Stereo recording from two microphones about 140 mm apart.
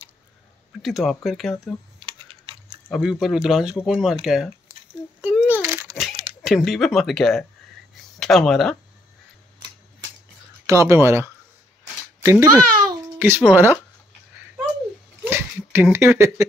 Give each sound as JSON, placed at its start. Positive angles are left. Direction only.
{"t": 0.8, "sound": "speech", "side_deg": 0}
{"t": 2.0, "sound": "typing", "side_deg": -40}
{"t": 2.9, "sound": "speech", "side_deg": 0}
{"t": 5.5, "sound": "a sound", "side_deg": -15}
{"t": 5.9, "sound": "speech", "side_deg": 0}
{"t": 10.7, "sound": "a child's voice", "side_deg": -20}
{"t": 13.2, "sound": "speech", "side_deg": -10}
{"t": 15.2, "sound": "a sound", "side_deg": -20}